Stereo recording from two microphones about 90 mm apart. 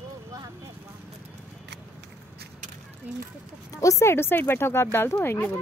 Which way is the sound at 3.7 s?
35° left (ahead or behind).